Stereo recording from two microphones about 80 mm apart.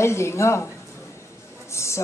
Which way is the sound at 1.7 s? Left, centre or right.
Left.